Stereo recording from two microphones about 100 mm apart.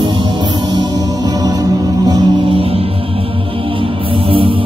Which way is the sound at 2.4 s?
70° right (ahead or behind).